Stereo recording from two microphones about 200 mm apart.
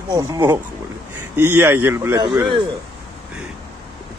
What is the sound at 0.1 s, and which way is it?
Speech, 20° right (ahead or behind).